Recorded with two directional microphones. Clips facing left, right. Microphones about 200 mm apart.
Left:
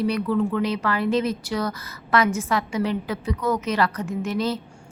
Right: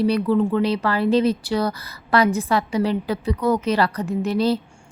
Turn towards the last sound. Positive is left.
turn(degrees=-35)  # may be behind; listen again after turning